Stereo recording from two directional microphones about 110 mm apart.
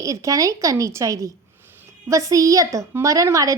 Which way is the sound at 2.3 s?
30° right (ahead or behind).